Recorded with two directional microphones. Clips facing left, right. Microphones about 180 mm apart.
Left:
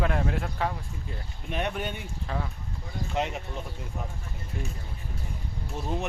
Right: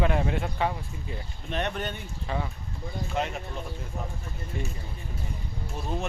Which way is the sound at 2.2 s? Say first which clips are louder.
Right 2 dB; 5° right (ahead or behind).